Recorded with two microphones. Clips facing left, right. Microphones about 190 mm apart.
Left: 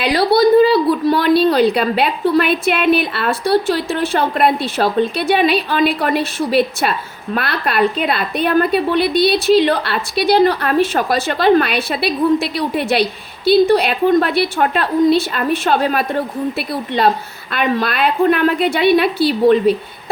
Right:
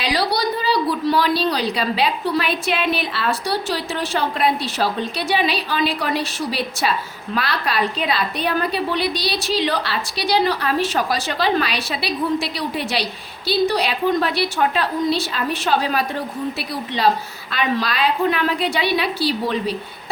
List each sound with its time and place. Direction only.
0.0 s a woman's voice: 55° left (ahead or behind)